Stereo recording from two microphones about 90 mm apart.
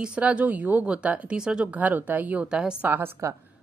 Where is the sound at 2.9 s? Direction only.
25° right (ahead or behind).